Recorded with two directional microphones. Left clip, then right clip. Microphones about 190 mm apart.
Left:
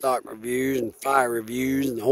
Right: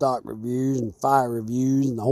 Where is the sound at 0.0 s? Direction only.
40° left (ahead or behind).